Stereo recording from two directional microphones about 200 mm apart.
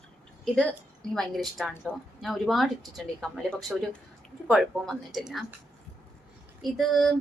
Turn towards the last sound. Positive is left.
turn(degrees=0)  # may be behind; listen again after turning